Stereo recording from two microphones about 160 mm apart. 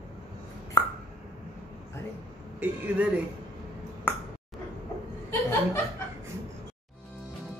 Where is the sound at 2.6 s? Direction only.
10° right (ahead or behind).